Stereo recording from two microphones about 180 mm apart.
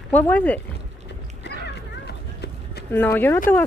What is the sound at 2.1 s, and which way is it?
Run, 70° left (ahead or behind).